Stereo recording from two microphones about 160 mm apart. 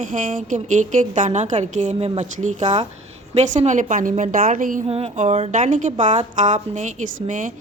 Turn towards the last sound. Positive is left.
turn(degrees=-55)  # may be behind; listen again after turning